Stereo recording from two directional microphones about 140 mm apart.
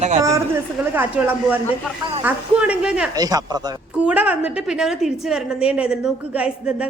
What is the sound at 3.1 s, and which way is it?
Speech, 25° right (ahead or behind).